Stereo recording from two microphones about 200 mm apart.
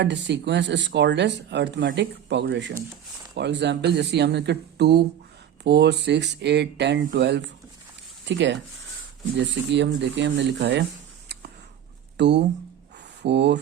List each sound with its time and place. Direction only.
0.0 s speech: 60° right (ahead or behind)
9.7 s speech: 60° right (ahead or behind)
12.1 s speech: 60° right (ahead or behind)